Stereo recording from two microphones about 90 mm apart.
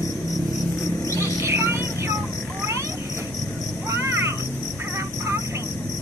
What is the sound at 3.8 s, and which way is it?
Vehicle, 30° right (ahead or behind).